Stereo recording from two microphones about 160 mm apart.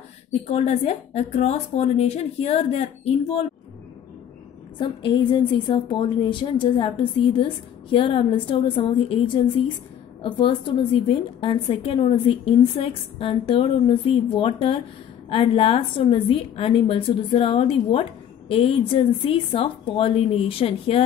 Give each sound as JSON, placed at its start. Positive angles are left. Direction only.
{"t": 0.5, "sound": "a woman's voice", "side_deg": 40}
{"t": 4.7, "sound": "a woman's voice", "side_deg": 30}